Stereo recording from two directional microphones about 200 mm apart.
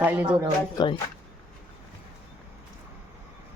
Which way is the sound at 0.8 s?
20° left (ahead or behind).